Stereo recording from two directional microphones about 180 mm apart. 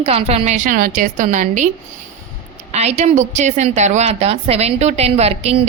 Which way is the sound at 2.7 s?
35° right (ahead or behind).